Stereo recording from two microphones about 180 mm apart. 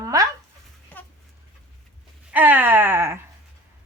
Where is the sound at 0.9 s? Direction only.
10° left (ahead or behind).